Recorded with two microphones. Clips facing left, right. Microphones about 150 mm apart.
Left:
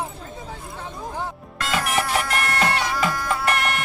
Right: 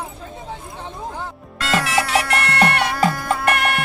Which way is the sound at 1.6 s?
80° right.